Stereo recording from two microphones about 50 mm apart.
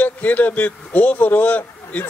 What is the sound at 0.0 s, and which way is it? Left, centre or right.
A man's voice, left.